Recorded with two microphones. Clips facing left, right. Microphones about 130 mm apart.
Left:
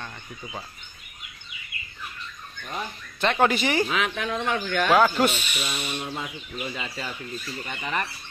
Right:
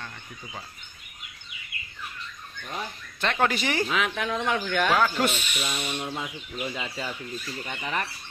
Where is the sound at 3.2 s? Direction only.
15° left (ahead or behind).